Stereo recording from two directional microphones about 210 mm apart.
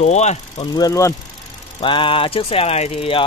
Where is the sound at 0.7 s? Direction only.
15° left (ahead or behind).